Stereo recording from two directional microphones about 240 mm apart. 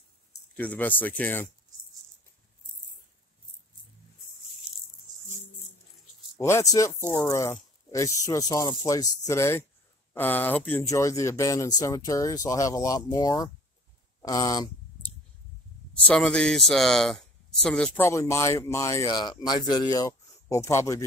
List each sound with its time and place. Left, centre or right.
0.6 s speech: centre
6.4 s speech: centre
15.9 s speech: centre